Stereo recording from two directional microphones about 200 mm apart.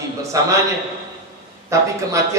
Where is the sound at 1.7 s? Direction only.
15° right (ahead or behind).